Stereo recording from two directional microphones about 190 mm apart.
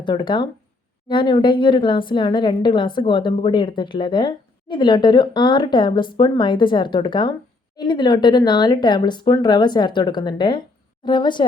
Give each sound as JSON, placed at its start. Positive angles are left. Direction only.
{"t": 0.0, "sound": "a woman's voice", "side_deg": 25}